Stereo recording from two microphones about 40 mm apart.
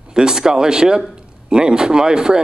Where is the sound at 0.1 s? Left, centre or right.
Centre.